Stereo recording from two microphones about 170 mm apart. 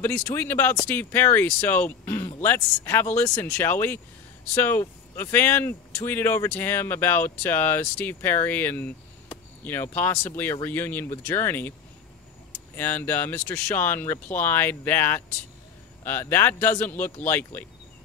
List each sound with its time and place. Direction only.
0.0 s speech: 10° left (ahead or behind)
12.7 s speech: 10° left (ahead or behind)